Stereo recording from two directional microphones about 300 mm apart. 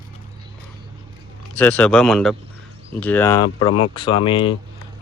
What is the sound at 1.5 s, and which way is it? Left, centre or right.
Speech, centre.